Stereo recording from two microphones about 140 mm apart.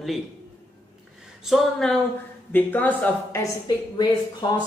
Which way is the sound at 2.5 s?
15° left (ahead or behind).